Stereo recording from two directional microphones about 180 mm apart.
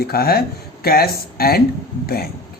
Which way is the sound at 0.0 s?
60° left (ahead or behind).